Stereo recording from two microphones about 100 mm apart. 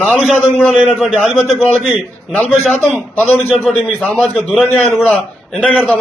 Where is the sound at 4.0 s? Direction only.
15° left (ahead or behind).